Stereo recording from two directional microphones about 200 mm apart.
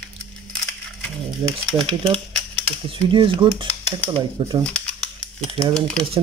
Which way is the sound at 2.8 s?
25° right (ahead or behind).